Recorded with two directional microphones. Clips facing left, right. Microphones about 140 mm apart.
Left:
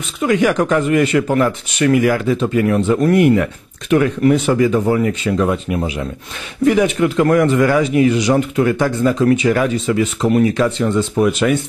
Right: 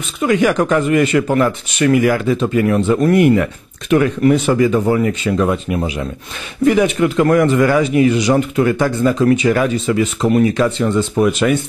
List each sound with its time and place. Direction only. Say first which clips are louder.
0.2 s speech: right 1 dB; 20° right (ahead or behind)